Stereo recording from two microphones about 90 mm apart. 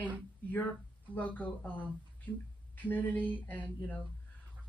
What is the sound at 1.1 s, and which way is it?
Speech, 20° left (ahead or behind).